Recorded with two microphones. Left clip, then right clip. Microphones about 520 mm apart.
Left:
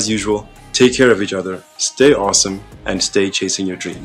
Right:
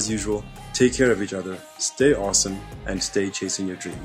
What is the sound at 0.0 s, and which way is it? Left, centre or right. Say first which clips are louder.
Speech: left 8 dB; left.